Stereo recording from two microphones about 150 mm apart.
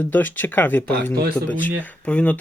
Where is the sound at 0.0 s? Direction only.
10° left (ahead or behind).